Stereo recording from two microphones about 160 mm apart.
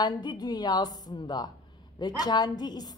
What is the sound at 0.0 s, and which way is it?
A woman's voice, 30° left (ahead or behind).